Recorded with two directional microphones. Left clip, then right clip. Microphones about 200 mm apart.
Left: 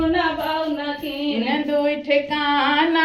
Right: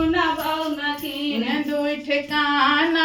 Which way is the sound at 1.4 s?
25° right (ahead or behind).